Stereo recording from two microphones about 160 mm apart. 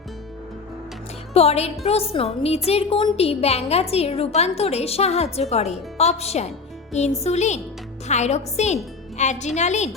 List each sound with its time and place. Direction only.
1.3 s a woman's voice: 40° left (ahead or behind)